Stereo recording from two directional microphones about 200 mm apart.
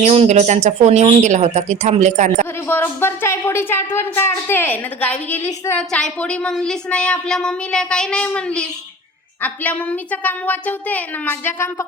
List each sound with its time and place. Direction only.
0.0 s speech: 35° right (ahead or behind)
2.6 s speech: 10° left (ahead or behind)